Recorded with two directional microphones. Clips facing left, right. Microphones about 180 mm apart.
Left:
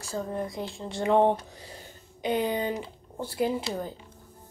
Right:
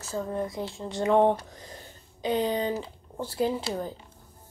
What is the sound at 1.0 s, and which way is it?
Speech, 25° left (ahead or behind).